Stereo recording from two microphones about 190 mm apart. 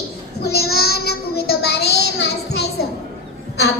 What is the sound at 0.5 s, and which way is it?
Child singing, 55° left (ahead or behind).